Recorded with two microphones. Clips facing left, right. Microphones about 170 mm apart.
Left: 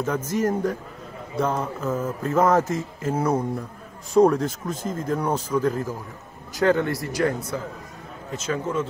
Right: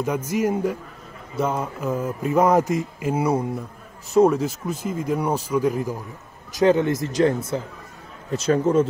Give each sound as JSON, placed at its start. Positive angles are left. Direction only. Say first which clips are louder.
{"t": 0.0, "sound": "mantra", "louder": "right 1 dB", "side_deg": -10}
{"t": 6.5, "sound": "speech", "louder": "right 3 dB", "side_deg": -20}
{"t": 8.3, "sound": "speech", "louder": "right 8 dB", "side_deg": -35}